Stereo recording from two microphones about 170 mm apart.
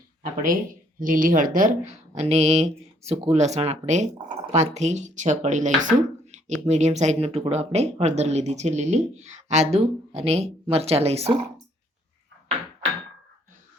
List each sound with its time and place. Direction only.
0.2 s speech: 55° right (ahead or behind); by 11.3 s 35° right (ahead or behind)